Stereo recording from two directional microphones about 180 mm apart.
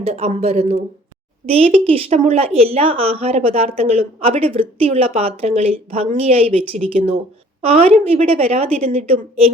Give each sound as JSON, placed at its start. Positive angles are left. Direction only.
{"t": 0.0, "sound": "speech", "side_deg": -35}